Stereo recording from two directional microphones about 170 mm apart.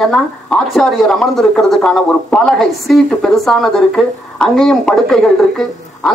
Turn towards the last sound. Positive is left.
turn(degrees=5)  # may be behind; listen again after turning